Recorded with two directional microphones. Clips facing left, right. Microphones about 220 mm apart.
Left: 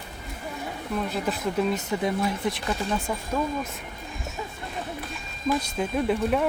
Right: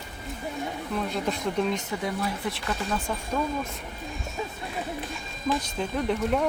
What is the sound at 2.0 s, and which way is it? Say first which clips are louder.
Speech: left 4 dB; 15° left (ahead or behind).